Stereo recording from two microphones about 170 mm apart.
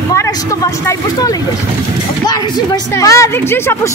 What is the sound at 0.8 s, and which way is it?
Speech, 20° left (ahead or behind).